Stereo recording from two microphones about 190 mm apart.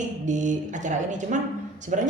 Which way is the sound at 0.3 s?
40° right (ahead or behind).